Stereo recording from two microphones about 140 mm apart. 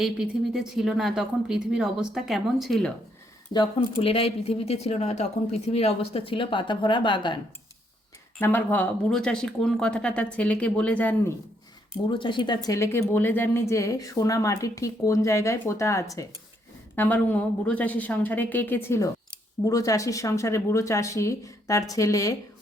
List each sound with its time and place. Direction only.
0.0 s speech: 5° right (ahead or behind)
3.5 s speech: 35° left (ahead or behind)
4.0 s speech: 45° left (ahead or behind)
8.4 s speech: 15° left (ahead or behind)
12.1 s speech: 35° left (ahead or behind)